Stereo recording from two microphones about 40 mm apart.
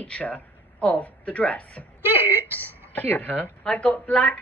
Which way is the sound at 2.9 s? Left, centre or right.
Left.